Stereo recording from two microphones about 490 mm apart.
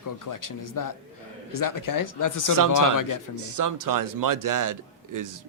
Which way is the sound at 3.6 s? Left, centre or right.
Right.